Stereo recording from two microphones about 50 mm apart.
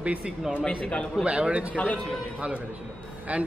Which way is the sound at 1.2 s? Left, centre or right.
Right.